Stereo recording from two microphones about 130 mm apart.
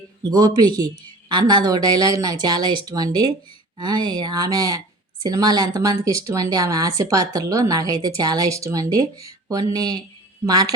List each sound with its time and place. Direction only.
0.3 s speech: 30° right (ahead or behind)